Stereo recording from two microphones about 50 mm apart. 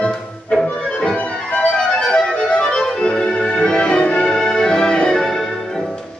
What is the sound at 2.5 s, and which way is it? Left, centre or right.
Music, centre.